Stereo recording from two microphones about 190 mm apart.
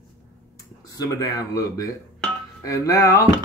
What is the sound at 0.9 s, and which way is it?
Speech, 20° left (ahead or behind).